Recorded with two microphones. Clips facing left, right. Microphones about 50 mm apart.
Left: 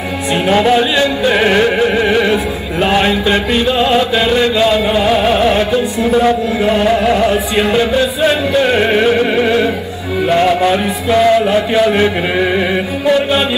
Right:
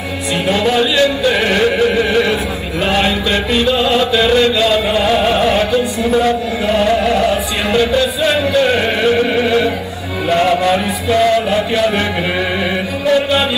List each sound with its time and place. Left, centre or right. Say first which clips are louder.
0.5 s music: left 3 dB; left
13.0 s chant: left 1 dB; centre